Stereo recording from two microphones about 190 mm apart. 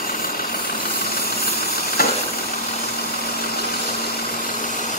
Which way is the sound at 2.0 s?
50° left (ahead or behind).